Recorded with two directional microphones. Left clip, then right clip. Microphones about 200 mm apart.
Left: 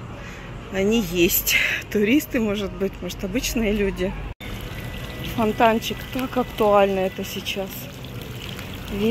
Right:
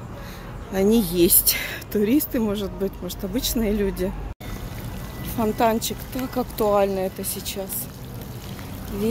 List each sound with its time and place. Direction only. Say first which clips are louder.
0.7 s speech: right 1 dB; 20° right (ahead or behind)
5.4 s speech: left 2 dB; 5° left (ahead or behind)